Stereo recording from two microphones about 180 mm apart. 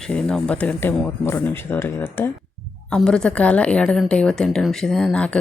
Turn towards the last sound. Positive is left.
turn(degrees=5)  # may be behind; listen again after turning